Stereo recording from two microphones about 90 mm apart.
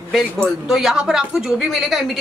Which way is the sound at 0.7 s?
5° right (ahead or behind).